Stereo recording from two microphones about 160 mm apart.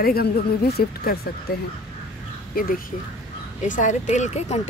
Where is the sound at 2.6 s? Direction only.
65° left (ahead or behind).